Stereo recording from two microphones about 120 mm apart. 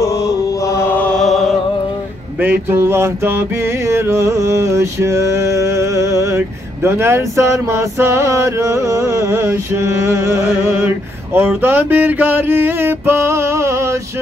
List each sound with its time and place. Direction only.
0.7 s chant: 15° left (ahead or behind)
2.4 s music: 20° right (ahead or behind)